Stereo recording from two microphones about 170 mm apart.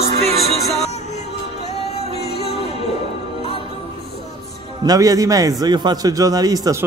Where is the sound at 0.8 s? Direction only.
40° left (ahead or behind).